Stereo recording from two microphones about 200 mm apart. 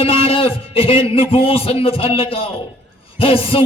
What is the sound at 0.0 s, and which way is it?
A man's voice, 30° left (ahead or behind).